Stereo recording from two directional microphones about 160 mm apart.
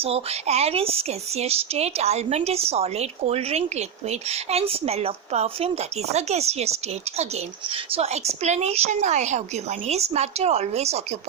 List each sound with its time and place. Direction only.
0.0 s speech: 40° right (ahead or behind)